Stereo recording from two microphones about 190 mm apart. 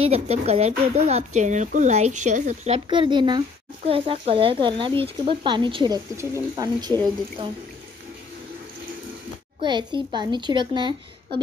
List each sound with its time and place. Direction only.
0.0 s a child's voice: 35° right (ahead or behind)
9.6 s a child's voice: 25° right (ahead or behind)